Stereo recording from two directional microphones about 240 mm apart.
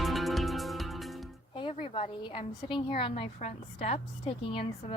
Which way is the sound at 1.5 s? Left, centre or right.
Left.